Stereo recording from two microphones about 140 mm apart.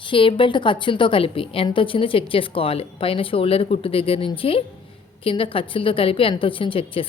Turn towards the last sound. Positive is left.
turn(degrees=40)  # may be behind; listen again after turning